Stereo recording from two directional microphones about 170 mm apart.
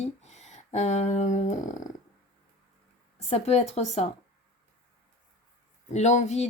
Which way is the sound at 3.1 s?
40° left (ahead or behind).